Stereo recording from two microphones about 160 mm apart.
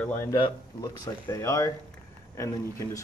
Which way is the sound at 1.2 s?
20° left (ahead or behind).